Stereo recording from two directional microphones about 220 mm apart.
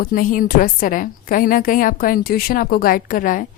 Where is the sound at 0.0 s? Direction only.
40° left (ahead or behind).